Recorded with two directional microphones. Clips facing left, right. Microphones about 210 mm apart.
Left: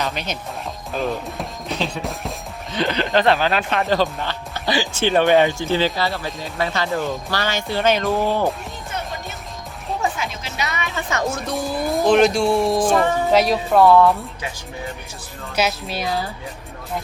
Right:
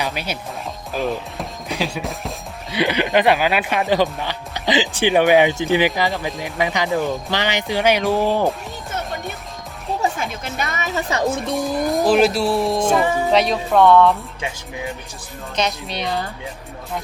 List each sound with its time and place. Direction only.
0.0 s speech: 10° right (ahead or behind)
0.9 s music: centre (ahead or behind)
1.8 s speech: centre (ahead or behind)
2.7 s speech: 10° right (ahead or behind)
10.4 s speech: 50° right (ahead or behind)
11.3 s speech: centre (ahead or behind)
15.5 s speech: 5° left (ahead or behind)